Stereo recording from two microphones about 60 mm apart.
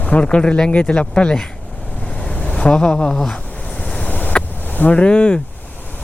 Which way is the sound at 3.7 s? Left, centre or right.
Left.